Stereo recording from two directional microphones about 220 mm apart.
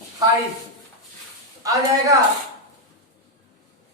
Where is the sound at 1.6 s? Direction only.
15° right (ahead or behind).